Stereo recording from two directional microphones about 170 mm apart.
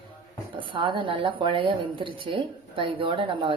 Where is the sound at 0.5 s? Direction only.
30° right (ahead or behind).